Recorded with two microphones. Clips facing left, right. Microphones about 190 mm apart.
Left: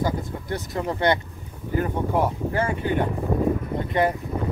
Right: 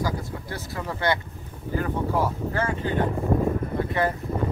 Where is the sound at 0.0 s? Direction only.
25° left (ahead or behind).